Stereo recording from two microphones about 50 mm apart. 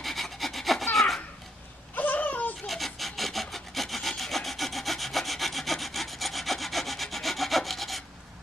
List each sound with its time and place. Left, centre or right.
0.0 s rub: centre
0.9 s laughter: centre
2.0 s a sound: left
2.6 s rub: centre